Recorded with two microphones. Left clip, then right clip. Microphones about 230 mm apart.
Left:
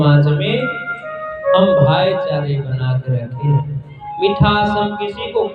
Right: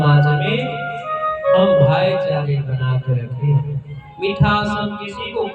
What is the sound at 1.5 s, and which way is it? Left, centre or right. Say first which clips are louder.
Speech: left 2 dB; right.